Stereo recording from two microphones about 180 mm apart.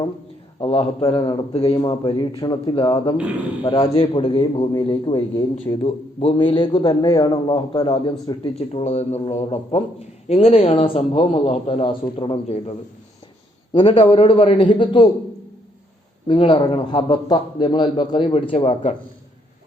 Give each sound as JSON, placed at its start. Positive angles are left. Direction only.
{"t": 0.6, "sound": "a man's voice", "side_deg": 30}
{"t": 13.7, "sound": "a man's voice", "side_deg": 30}
{"t": 16.2, "sound": "a man's voice", "side_deg": 25}